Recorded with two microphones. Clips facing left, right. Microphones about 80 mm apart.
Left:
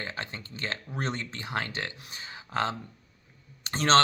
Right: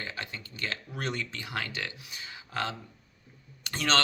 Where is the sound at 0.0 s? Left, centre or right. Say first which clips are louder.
Left 2 dB; left.